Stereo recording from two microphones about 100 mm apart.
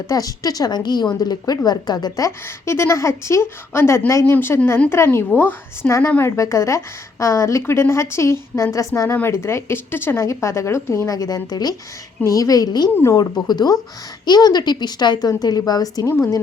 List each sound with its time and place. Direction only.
0.1 s a woman's voice: 40° left (ahead or behind)